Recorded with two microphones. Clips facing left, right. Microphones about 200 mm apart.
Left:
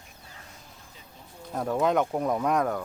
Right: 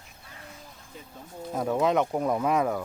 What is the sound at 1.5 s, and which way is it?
Speech, 5° right (ahead or behind).